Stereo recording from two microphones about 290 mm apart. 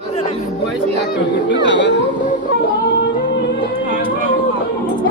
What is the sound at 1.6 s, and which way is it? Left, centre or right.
Chatter, left.